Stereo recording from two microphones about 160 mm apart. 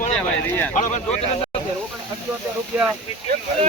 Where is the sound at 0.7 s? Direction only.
50° left (ahead or behind).